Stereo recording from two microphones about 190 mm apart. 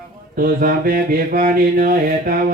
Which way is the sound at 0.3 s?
50° right (ahead or behind).